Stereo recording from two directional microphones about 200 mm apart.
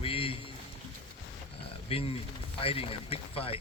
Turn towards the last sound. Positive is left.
turn(degrees=30)  # may be behind; listen again after turning